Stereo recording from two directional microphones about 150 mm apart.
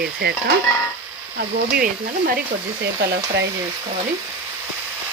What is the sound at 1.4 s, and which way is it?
Speech, 85° right.